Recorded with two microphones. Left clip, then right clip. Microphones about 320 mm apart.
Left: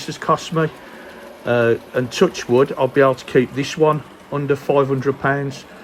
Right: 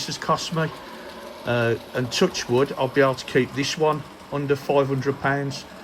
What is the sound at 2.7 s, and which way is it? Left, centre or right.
Speech, left.